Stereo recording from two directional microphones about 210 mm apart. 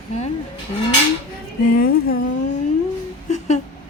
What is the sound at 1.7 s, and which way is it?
Music, 45° left (ahead or behind).